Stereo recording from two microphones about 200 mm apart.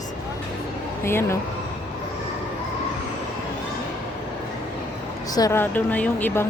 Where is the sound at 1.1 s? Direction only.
10° left (ahead or behind).